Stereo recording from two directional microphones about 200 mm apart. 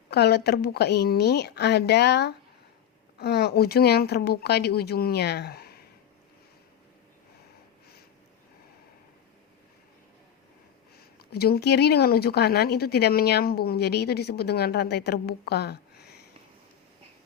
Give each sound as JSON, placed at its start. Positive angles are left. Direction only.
{"t": 0.1, "sound": "a woman's voice", "side_deg": 55}
{"t": 10.9, "sound": "speech", "side_deg": 50}